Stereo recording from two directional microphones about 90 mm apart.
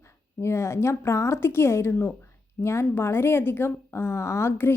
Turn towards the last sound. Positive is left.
turn(degrees=25)  # may be behind; listen again after turning